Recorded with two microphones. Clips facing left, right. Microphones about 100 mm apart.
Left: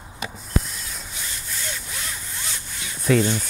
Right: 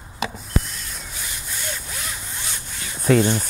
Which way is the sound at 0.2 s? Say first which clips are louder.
Right 6 dB; 90° right.